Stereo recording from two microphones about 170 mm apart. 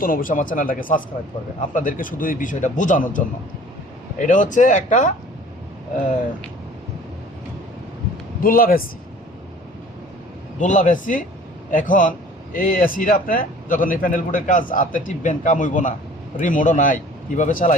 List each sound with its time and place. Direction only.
0.0 s a man's voice: 55° left (ahead or behind)
8.4 s a man's voice: 55° left (ahead or behind)
10.6 s a man's voice: 50° left (ahead or behind)